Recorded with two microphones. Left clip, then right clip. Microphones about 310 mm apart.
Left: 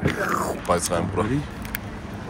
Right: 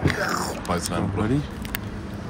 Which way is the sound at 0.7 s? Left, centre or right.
Centre.